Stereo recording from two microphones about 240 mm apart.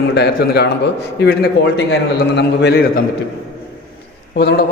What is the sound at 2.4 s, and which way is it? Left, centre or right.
Speech, left.